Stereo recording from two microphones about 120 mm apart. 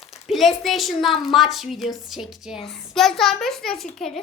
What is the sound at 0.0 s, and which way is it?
A woman's voice, centre (ahead or behind).